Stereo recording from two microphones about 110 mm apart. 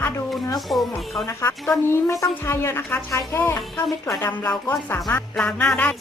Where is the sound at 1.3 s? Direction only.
30° left (ahead or behind).